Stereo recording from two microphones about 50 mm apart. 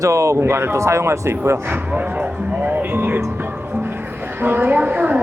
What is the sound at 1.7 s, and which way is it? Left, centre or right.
Speech, right.